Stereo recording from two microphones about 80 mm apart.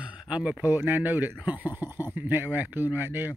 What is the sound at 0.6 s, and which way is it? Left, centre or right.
Speech, right.